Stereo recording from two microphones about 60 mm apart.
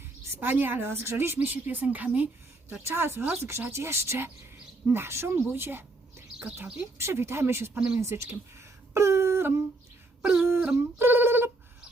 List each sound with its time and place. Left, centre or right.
0.3 s a woman's voice: right
1.4 s speech: right
2.1 s a sound: right
2.8 s a woman's voice: right
8.9 s humming: right
10.3 s a sound: right
10.8 s telephone dialing: right